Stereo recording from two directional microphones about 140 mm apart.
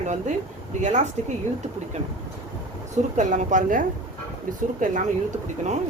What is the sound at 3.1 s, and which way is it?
Speech, 60° right (ahead or behind).